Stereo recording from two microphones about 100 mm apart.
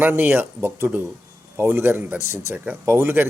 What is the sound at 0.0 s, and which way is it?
Speech, 20° right (ahead or behind).